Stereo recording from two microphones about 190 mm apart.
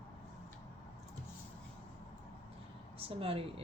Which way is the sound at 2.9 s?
30° right (ahead or behind).